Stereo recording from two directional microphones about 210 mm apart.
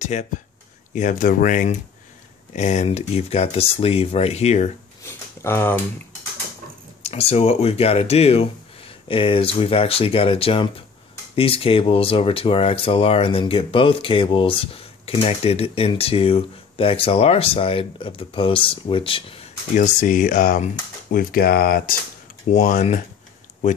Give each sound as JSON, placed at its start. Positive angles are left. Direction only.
{"t": 0.0, "sound": "speech", "side_deg": 35}
{"t": 5.0, "sound": "speech", "side_deg": 10}
{"t": 7.0, "sound": "speech", "side_deg": 30}
{"t": 22.5, "sound": "speech", "side_deg": 35}